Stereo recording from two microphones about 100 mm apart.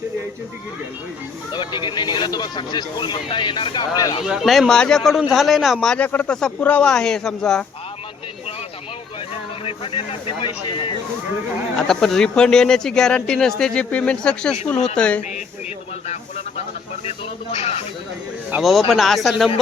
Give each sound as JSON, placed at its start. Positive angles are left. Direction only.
{"t": 1.5, "sound": "speech", "side_deg": 50}
{"t": 4.2, "sound": "speech", "side_deg": -5}
{"t": 9.6, "sound": "speech", "side_deg": 65}
{"t": 11.8, "sound": "speech", "side_deg": 5}
{"t": 17.1, "sound": "speech", "side_deg": 90}
{"t": 18.9, "sound": "speech", "side_deg": 0}